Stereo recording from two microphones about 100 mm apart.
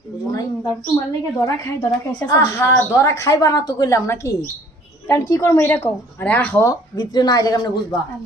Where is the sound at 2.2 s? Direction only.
30° left (ahead or behind).